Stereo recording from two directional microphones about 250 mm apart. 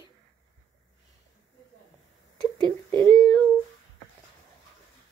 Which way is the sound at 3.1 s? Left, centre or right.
Centre.